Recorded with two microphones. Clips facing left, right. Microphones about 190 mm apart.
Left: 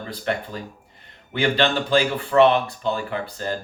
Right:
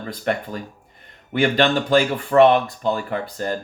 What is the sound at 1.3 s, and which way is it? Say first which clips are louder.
Speech: right 3 dB; 45° right (ahead or behind).